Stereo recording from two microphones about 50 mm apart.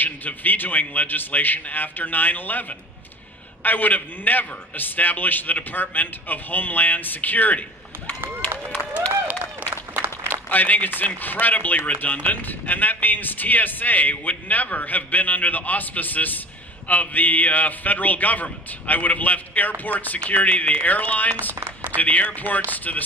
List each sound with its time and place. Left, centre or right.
0.0 s speech: left
3.6 s speech: left
9.3 s applause: right
9.7 s applause: right
10.5 s speech: left
21.5 s speech: right
21.9 s speech: left